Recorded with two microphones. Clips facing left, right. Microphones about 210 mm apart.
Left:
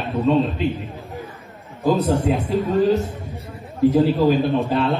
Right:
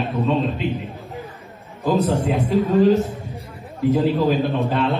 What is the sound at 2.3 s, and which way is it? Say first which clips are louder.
A man's voice: right 2 dB; centre (ahead or behind).